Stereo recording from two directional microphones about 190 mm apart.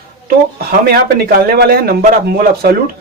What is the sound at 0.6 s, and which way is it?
A man's voice, 55° right (ahead or behind).